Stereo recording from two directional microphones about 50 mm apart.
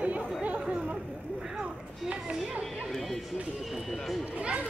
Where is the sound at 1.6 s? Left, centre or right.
Right.